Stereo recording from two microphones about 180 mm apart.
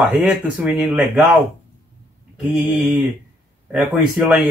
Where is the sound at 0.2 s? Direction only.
5° right (ahead or behind).